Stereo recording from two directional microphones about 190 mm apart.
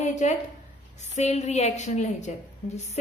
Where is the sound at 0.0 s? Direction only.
35° left (ahead or behind).